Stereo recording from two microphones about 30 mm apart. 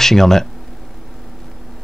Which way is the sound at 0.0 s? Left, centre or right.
Centre.